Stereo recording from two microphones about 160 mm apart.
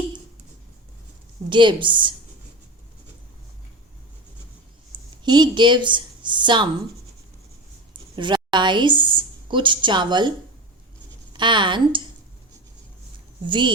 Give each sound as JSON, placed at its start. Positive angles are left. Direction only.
{"t": 1.5, "sound": "a woman's voice", "side_deg": -30}
{"t": 5.1, "sound": "a woman's voice", "side_deg": -25}
{"t": 8.1, "sound": "a woman's voice", "side_deg": -30}
{"t": 11.3, "sound": "speech", "side_deg": -30}
{"t": 13.5, "sound": "a woman's voice", "side_deg": -30}